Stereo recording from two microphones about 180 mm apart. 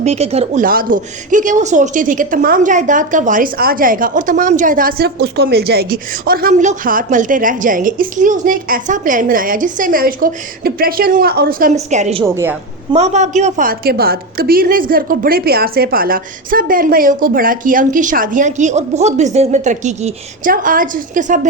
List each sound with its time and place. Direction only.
0.0 s speech: 35° right (ahead or behind)
0.6 s speech: 50° right (ahead or behind)
11.9 s speech: 40° right (ahead or behind)
12.2 s a woman's voice: 15° right (ahead or behind)
12.9 s speech: 40° right (ahead or behind)